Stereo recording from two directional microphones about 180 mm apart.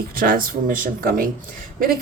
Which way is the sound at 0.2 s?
55° right (ahead or behind).